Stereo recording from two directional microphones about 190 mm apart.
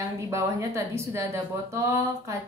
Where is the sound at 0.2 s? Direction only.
15° right (ahead or behind).